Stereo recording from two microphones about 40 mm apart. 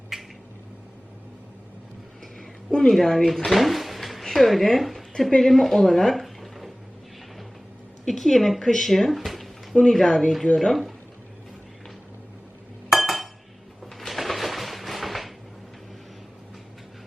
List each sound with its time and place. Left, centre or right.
0.1 s a sound: centre
2.6 s a woman's voice: centre
8.0 s speech: centre
9.8 s speech: centre
10.7 s speech: centre
12.9 s chink: centre
14.1 s a sound: centre